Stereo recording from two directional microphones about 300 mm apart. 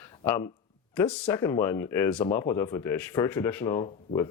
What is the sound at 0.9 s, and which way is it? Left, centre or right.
Speech, centre.